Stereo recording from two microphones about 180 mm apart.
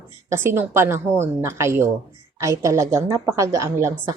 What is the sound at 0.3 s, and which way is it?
A woman's voice, 15° right (ahead or behind).